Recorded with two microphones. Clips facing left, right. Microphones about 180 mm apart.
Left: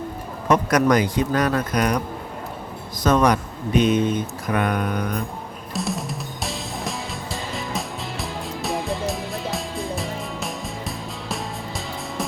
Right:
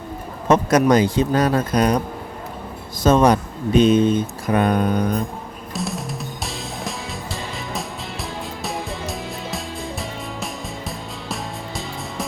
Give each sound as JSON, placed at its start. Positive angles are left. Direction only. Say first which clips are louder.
{"t": 0.4, "sound": "speech", "louder": "right 3 dB", "side_deg": -25}
{"t": 3.0, "sound": "speech", "louder": "right 3 dB", "side_deg": -25}
{"t": 5.7, "sound": "music", "louder": "even", "side_deg": 0}